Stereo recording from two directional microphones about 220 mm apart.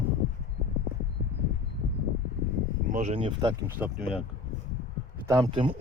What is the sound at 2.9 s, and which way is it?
Speech, 30° right (ahead or behind).